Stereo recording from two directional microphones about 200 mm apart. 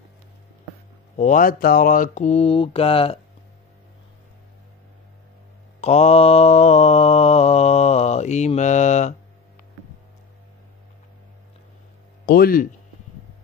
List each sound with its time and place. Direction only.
1.1 s speech: 40° left (ahead or behind)
5.8 s mantra: 30° left (ahead or behind)
12.3 s speech: 45° left (ahead or behind)